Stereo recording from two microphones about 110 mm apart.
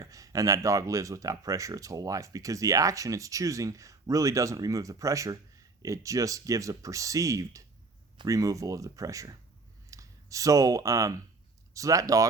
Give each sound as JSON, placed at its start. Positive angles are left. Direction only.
{"t": 0.0, "sound": "speech", "side_deg": -30}